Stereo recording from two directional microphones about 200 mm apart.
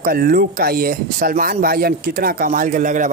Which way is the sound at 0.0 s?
45° right (ahead or behind).